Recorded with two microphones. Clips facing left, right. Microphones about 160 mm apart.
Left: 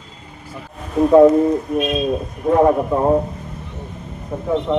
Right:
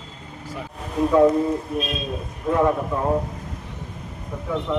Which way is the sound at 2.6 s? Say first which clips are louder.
Left 6 dB; 40° left (ahead or behind).